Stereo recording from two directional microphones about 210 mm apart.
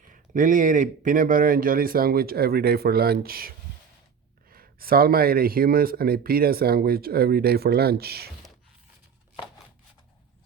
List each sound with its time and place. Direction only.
0.1 s speech: 40° right (ahead or behind)